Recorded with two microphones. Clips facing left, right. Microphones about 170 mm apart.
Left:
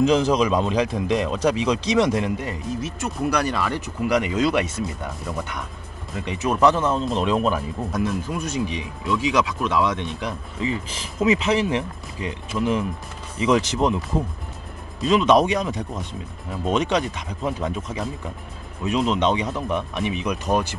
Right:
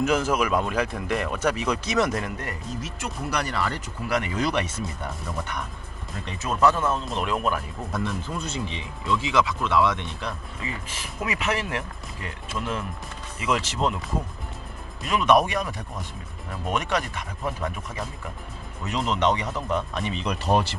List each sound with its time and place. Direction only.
0.0 s speech: 15° left (ahead or behind)
6.2 s speech: 15° left (ahead or behind)
17.4 s speech: 20° left (ahead or behind)
20.2 s speech: centre (ahead or behind)